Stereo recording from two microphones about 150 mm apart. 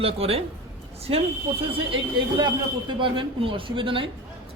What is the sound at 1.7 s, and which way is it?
A woman's voice, 35° right (ahead or behind).